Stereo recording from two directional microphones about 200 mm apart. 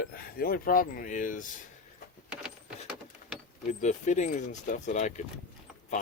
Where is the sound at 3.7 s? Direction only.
40° left (ahead or behind).